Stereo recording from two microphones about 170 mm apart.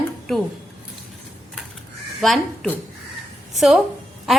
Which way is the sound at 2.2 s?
Centre (ahead or behind).